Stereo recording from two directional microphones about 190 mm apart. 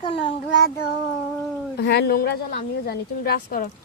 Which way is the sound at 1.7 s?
60° left (ahead or behind).